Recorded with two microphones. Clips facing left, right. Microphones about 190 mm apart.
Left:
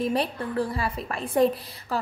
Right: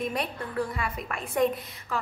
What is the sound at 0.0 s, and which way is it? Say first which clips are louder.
A woman's voice: left 5 dB; 30° left (ahead or behind).